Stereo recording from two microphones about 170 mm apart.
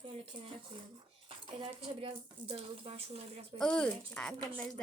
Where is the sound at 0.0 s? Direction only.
30° right (ahead or behind).